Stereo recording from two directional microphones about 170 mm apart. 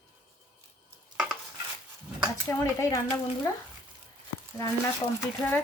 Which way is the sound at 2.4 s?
15° left (ahead or behind).